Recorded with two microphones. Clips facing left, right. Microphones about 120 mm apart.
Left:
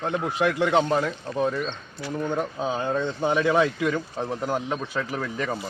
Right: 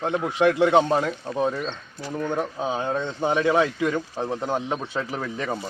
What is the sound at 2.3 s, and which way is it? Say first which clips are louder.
Speech: right 1 dB; 15° right (ahead or behind).